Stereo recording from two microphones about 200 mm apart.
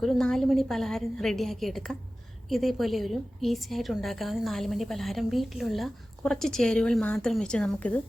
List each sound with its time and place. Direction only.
0.0 s a woman's voice: centre (ahead or behind)